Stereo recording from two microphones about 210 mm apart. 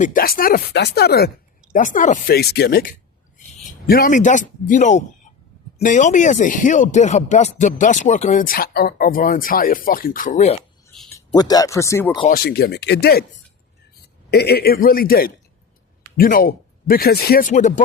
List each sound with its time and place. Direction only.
0.0 s speech: 40° left (ahead or behind)
1.7 s speech: 40° left (ahead or behind)
11.3 s speech: 15° left (ahead or behind)
12.3 s speech: 45° left (ahead or behind)
14.3 s speech: 50° left (ahead or behind)